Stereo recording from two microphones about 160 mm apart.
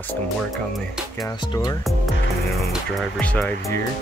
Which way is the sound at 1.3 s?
25° left (ahead or behind).